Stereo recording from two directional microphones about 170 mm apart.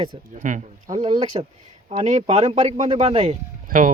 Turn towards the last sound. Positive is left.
turn(degrees=-55)  # may be behind; listen again after turning